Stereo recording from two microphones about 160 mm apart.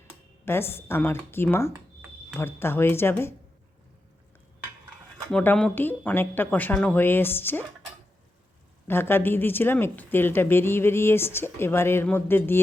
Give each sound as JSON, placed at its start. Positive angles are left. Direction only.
{"t": 0.4, "sound": "a woman's voice", "side_deg": 15}
{"t": 5.3, "sound": "a woman's voice", "side_deg": 10}
{"t": 8.9, "sound": "a woman's voice", "side_deg": 15}